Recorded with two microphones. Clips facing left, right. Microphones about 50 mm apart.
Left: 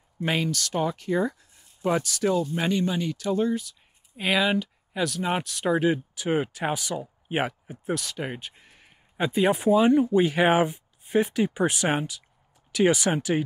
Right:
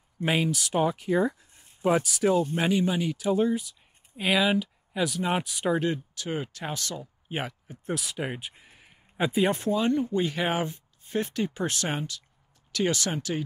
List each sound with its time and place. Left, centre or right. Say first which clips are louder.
0.2 s speech: even; centre
5.8 s speech: left 4 dB; centre
7.8 s speech: left 2 dB; centre
9.6 s speech: left 6 dB; centre